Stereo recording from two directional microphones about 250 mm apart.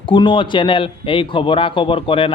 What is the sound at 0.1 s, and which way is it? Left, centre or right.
Speech, centre.